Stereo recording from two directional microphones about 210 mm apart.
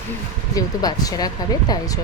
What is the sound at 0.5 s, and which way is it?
Speech, 15° left (ahead or behind).